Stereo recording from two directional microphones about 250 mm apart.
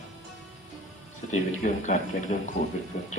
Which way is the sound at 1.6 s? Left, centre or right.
Left.